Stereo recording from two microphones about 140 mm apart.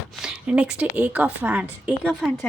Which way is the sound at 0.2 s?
5° right (ahead or behind).